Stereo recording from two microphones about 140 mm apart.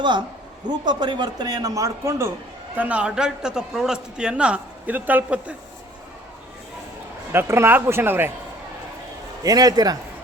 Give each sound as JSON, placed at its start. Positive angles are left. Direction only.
{"t": 0.7, "sound": "speech", "side_deg": -30}
{"t": 2.7, "sound": "a man's voice", "side_deg": -10}
{"t": 7.3, "sound": "a man's voice", "side_deg": -20}
{"t": 9.4, "sound": "speech", "side_deg": -25}